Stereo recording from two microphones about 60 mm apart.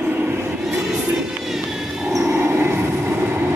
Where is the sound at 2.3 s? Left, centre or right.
Right.